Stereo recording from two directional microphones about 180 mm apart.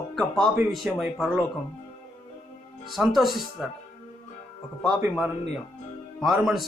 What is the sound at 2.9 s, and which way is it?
Speech, centre (ahead or behind).